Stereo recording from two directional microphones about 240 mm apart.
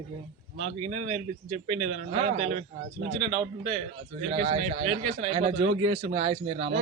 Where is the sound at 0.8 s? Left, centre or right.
Right.